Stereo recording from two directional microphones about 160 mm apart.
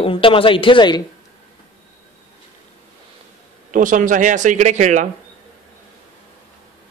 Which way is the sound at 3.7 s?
55° right (ahead or behind).